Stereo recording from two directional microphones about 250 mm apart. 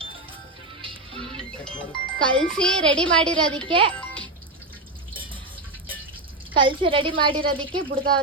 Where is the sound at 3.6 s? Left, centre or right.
Centre.